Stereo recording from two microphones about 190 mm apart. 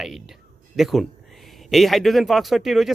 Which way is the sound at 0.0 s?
Centre (ahead or behind).